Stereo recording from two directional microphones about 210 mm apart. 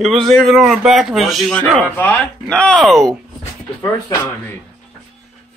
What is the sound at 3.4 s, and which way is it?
Dog, 25° left (ahead or behind).